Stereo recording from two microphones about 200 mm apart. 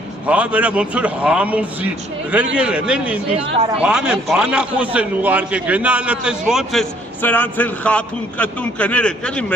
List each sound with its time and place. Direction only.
0.3 s a man's voice: 5° right (ahead or behind)